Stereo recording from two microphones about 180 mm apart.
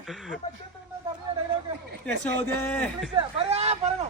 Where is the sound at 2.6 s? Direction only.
10° left (ahead or behind).